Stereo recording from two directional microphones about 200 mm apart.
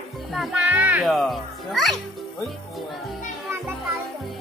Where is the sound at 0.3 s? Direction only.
Centre (ahead or behind).